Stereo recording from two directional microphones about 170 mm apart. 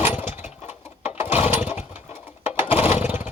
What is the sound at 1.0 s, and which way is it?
Lawn mower, 40° left (ahead or behind).